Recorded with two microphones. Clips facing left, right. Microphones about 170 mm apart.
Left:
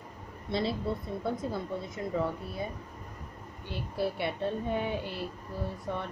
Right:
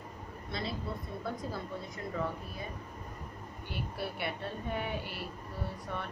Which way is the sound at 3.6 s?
25° left (ahead or behind).